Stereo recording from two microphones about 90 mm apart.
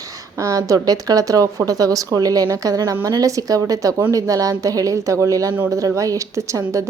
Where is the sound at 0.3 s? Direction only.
40° right (ahead or behind).